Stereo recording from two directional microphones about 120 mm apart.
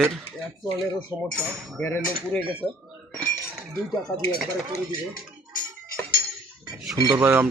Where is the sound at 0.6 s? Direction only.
45° left (ahead or behind).